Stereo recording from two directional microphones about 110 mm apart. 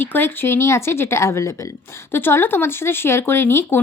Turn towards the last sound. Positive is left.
turn(degrees=20)  # may be behind; listen again after turning